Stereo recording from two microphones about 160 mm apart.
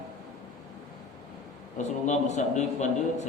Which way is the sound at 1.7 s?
45° left (ahead or behind).